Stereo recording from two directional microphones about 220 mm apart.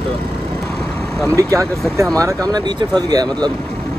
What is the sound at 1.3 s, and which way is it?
Speech, 15° right (ahead or behind).